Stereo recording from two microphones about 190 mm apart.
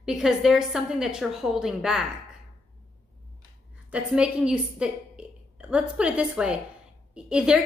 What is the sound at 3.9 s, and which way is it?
A woman's voice, 5° right (ahead or behind).